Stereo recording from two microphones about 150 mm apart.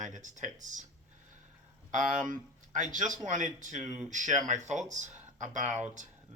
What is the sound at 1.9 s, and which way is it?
Speech, 60° right (ahead or behind).